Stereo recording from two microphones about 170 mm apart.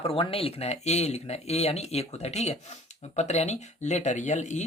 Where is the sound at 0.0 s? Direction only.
35° left (ahead or behind).